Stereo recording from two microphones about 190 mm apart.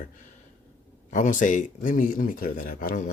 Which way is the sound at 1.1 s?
40° left (ahead or behind).